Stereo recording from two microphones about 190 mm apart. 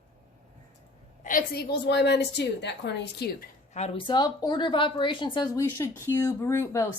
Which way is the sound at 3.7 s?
30° left (ahead or behind).